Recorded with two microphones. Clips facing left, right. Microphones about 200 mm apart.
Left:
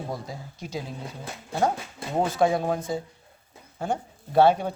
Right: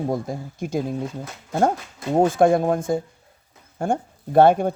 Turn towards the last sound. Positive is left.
turn(degrees=-50)  # may be behind; listen again after turning